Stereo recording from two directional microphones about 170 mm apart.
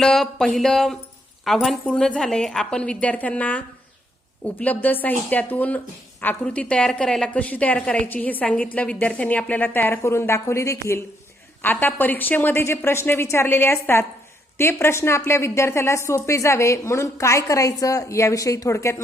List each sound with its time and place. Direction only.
0.0 s a woman's voice: centre (ahead or behind)